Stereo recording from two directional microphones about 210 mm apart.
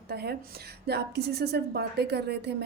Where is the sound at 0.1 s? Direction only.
50° right (ahead or behind).